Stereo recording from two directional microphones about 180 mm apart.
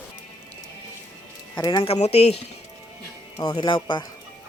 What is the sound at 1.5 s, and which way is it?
Speech, 20° left (ahead or behind).